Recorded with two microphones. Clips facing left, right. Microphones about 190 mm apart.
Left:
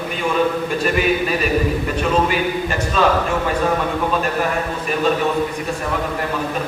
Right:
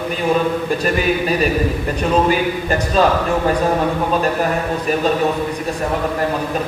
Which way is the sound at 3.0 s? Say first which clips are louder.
Right 2 dB; 40° right (ahead or behind).